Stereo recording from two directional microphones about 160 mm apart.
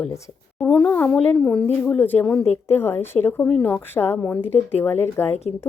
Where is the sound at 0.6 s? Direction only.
5° left (ahead or behind).